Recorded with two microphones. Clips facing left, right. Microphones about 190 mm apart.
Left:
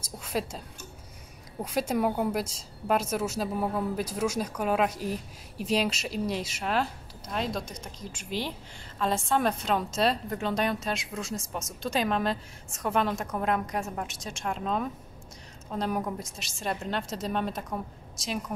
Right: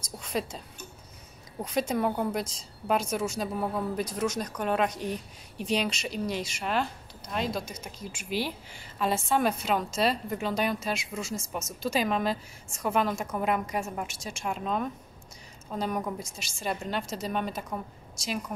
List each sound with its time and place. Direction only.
0.2 s speech: 5° left (ahead or behind)
1.6 s a woman's voice: 5° left (ahead or behind)